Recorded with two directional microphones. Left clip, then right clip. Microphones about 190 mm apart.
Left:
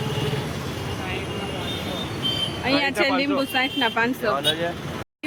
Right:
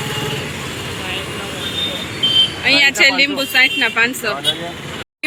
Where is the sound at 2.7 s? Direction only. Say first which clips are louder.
Right 7 dB; 30° left (ahead or behind).